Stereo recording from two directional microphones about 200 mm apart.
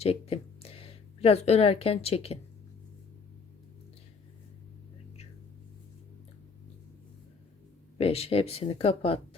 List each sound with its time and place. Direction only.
0.0 s a sound: 30° left (ahead or behind)
1.2 s speech: 30° left (ahead or behind)
7.9 s speech: 30° left (ahead or behind)